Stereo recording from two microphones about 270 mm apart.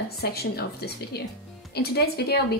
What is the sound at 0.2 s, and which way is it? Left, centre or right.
A woman's voice, left.